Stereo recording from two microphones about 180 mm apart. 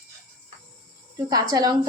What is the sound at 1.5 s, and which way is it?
Speech, 20° right (ahead or behind).